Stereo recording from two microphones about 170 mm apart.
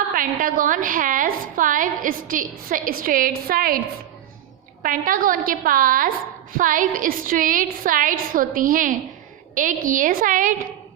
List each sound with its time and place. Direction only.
0.1 s a woman's voice: 55° right (ahead or behind)
4.8 s a woman's voice: 55° right (ahead or behind)